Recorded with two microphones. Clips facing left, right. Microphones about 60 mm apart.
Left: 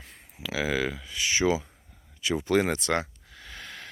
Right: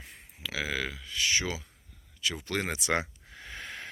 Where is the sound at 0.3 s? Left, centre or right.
Centre.